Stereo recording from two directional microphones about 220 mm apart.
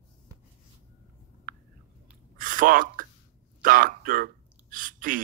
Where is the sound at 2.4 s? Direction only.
40° right (ahead or behind).